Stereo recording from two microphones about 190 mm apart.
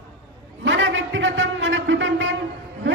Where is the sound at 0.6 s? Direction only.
75° right (ahead or behind).